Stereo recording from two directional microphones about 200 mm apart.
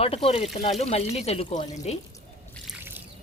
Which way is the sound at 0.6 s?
30° left (ahead or behind).